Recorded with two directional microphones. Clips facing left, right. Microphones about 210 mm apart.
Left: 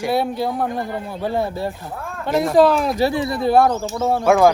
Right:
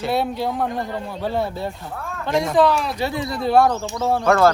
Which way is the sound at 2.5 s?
45° left (ahead or behind).